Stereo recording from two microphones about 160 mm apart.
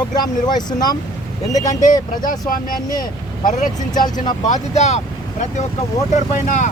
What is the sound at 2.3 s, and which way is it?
Speech, 60° left (ahead or behind).